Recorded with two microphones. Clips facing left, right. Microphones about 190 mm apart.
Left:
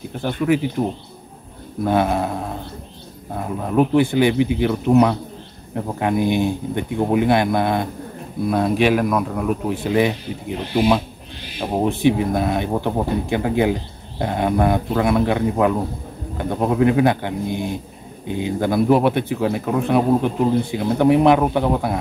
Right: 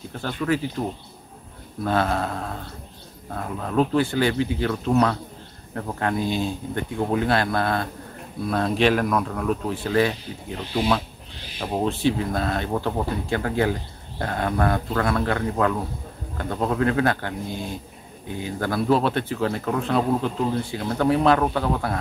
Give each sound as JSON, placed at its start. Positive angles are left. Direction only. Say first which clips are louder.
{"t": 0.1, "sound": "speech", "louder": "left 5 dB", "side_deg": 15}